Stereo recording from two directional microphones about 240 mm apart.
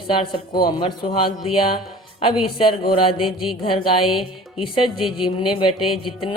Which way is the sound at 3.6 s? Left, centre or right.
Left.